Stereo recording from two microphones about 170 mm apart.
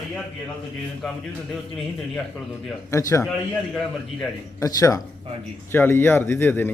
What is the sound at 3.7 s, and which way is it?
Speech, 5° left (ahead or behind).